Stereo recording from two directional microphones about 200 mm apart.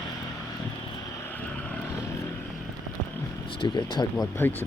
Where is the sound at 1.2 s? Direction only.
10° left (ahead or behind).